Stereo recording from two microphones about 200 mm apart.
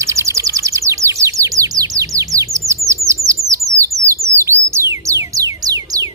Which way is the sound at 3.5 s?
15° right (ahead or behind).